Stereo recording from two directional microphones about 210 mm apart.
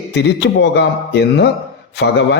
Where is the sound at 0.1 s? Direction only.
55° left (ahead or behind).